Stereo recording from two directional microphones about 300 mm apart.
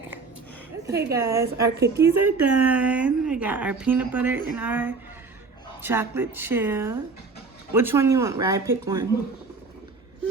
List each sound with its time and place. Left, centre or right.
0.9 s a woman's voice: centre